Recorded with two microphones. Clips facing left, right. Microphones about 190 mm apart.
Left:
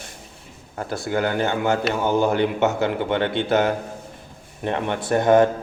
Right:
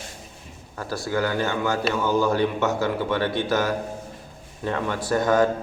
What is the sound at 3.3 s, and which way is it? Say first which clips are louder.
Speech: left 3 dB; 65° left (ahead or behind).